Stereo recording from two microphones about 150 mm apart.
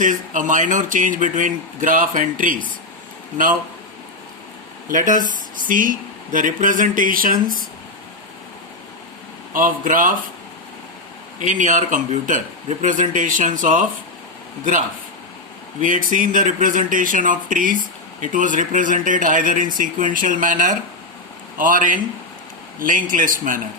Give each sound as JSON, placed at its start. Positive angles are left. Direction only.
{"t": 0.0, "sound": "speech", "side_deg": -60}
{"t": 4.9, "sound": "speech", "side_deg": -60}
{"t": 9.5, "sound": "speech", "side_deg": -65}
{"t": 11.3, "sound": "speech", "side_deg": -55}